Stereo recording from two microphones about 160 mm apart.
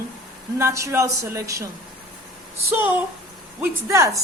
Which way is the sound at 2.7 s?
10° right (ahead or behind).